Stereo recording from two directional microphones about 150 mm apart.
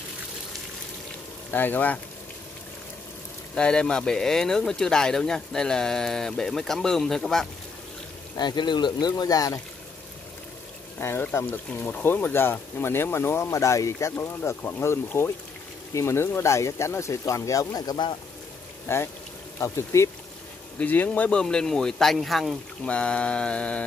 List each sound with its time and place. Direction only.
1.5 s speech: 10° left (ahead or behind)
3.5 s speech: 5° left (ahead or behind)
8.4 s speech: 30° left (ahead or behind)
11.0 s speech: 15° left (ahead or behind)
18.9 s speech: 15° left (ahead or behind)